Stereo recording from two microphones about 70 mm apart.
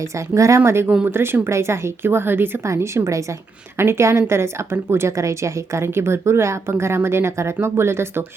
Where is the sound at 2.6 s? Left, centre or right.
Right.